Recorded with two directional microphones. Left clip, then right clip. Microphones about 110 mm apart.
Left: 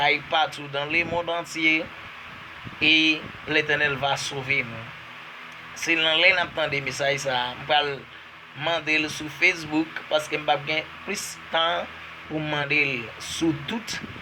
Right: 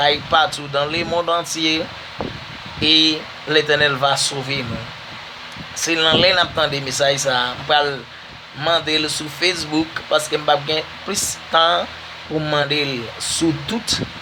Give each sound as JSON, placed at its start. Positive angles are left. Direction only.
{"t": 0.0, "sound": "speech", "side_deg": -25}
{"t": 2.8, "sound": "speech", "side_deg": -25}
{"t": 5.8, "sound": "speech", "side_deg": -30}